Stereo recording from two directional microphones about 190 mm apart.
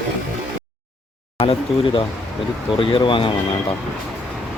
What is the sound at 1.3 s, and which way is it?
Speech, 30° left (ahead or behind).